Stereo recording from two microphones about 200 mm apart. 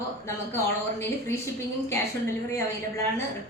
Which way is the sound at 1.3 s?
10° left (ahead or behind).